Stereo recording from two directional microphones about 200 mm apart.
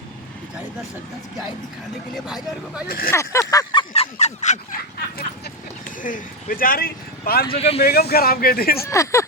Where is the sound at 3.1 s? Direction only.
15° left (ahead or behind).